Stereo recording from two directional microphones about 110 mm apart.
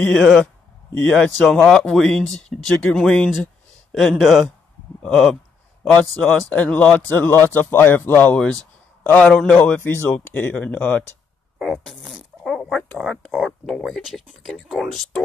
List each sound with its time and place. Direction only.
0.0 s speech: 5° left (ahead or behind)
11.5 s fart: 5° left (ahead or behind)
13.0 s speech: 5° left (ahead or behind)